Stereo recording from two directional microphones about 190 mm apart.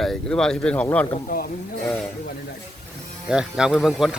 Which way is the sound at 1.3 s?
50° left (ahead or behind).